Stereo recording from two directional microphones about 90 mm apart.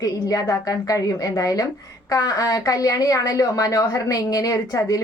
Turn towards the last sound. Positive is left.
turn(degrees=40)  # may be behind; listen again after turning